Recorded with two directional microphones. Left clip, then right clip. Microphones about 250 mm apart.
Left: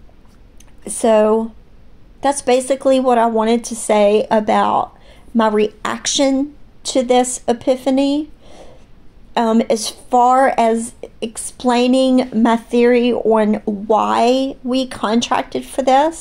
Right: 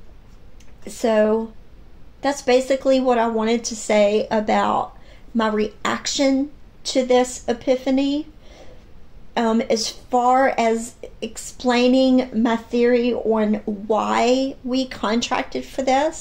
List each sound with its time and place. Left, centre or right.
0.8 s speech: left